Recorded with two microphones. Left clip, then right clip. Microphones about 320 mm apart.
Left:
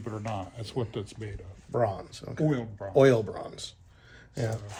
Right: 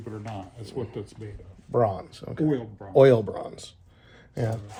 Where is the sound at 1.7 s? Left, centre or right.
Right.